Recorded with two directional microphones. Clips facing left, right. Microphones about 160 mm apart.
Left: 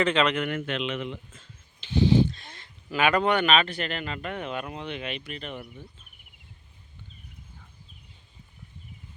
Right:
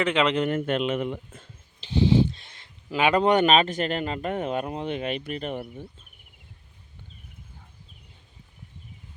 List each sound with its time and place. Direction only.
0.0 s speech: 15° right (ahead or behind)
0.3 s speech: 40° right (ahead or behind)
1.8 s speech: 40° right (ahead or behind)
2.9 s speech: 25° right (ahead or behind)
3.3 s speech: 40° right (ahead or behind)